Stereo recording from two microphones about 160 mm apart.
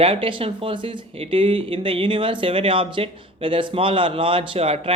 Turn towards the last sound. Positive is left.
turn(degrees=-40)  # may be behind; listen again after turning